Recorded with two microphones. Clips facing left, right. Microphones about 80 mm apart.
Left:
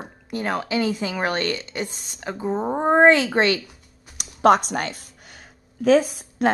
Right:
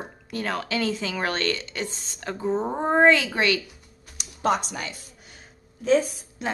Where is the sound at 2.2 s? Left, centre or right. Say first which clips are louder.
Left 1 dB; centre.